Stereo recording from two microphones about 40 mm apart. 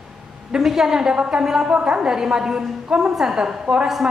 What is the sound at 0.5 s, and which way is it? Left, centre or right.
A woman's voice, centre.